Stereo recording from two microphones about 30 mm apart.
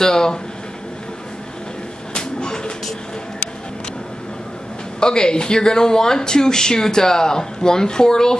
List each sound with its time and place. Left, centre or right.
0.0 s speech: left
2.1 s a sound: left
5.0 s speech: left